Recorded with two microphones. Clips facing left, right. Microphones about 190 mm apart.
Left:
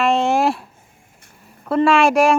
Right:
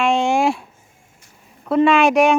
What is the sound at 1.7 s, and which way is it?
Speech, centre (ahead or behind).